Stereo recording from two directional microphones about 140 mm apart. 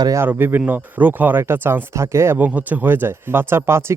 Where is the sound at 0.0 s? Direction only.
25° right (ahead or behind).